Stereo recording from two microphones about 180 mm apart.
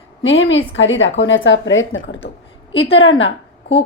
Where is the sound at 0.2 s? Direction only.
90° left.